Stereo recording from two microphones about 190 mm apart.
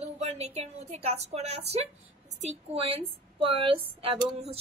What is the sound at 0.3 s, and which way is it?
A woman's voice, 35° right (ahead or behind).